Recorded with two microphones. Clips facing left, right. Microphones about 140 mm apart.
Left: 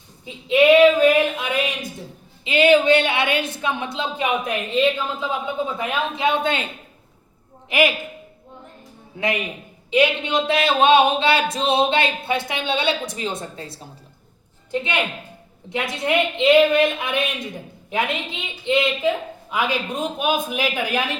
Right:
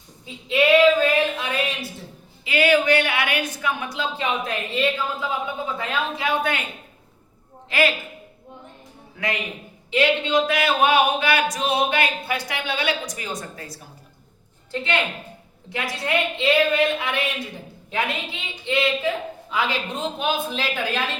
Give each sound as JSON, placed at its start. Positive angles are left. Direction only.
{"t": 0.3, "sound": "a sound", "side_deg": 20}
{"t": 2.4, "sound": "speech", "side_deg": 20}
{"t": 7.7, "sound": "speech", "side_deg": 15}
{"t": 9.1, "sound": "speech", "side_deg": 20}